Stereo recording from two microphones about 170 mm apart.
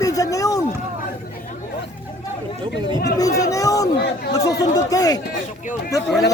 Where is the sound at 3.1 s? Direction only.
20° left (ahead or behind).